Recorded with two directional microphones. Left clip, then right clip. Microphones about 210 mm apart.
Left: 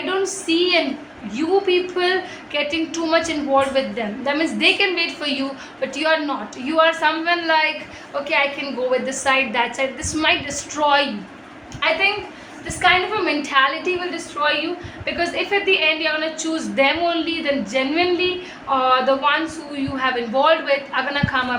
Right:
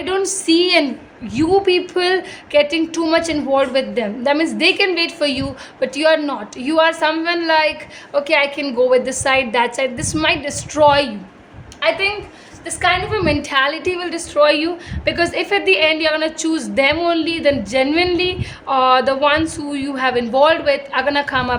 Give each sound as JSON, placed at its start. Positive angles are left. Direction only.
{"t": 0.2, "sound": "a woman's voice", "side_deg": -55}